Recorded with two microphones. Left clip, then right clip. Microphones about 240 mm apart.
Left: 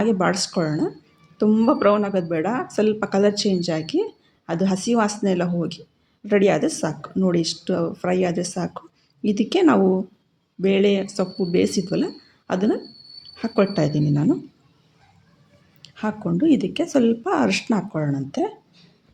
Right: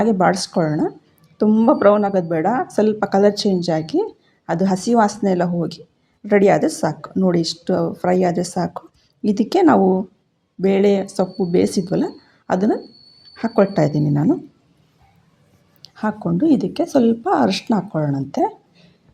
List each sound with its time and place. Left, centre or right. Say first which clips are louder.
0.0 s speech: right 4 dB; centre
16.0 s speech: right 3 dB; centre